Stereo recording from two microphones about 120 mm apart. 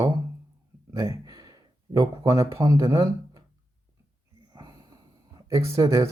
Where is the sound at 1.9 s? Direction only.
30° right (ahead or behind).